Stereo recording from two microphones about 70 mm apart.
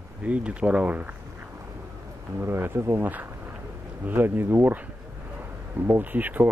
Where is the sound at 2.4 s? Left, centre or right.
Right.